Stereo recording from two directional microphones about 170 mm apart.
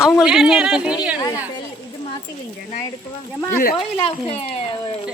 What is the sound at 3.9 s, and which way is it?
Speech, 35° left (ahead or behind).